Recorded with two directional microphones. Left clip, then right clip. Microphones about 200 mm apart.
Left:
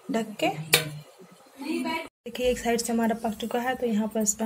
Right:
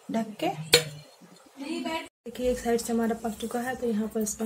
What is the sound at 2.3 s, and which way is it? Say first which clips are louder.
A woman's voice: left 1 dB; 20° left (ahead or behind).